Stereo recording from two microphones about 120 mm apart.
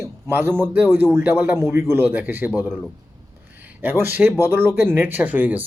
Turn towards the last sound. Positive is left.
turn(degrees=-15)  # may be behind; listen again after turning